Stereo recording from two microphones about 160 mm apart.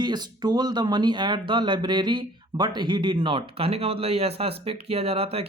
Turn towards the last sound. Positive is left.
turn(degrees=-40)  # may be behind; listen again after turning